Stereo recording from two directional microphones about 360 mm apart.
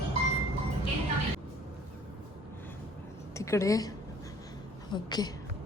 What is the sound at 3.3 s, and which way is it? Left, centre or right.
A woman's voice, centre.